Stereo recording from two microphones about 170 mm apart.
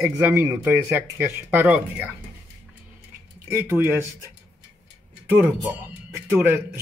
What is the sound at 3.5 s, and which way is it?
Speech, 15° right (ahead or behind).